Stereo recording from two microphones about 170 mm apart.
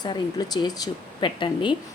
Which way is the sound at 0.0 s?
25° left (ahead or behind).